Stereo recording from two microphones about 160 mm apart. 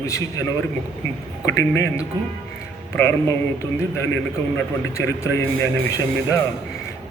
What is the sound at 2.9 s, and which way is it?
A man's voice, 15° left (ahead or behind).